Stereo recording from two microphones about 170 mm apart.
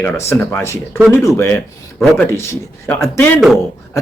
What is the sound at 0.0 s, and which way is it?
Speech, 15° left (ahead or behind).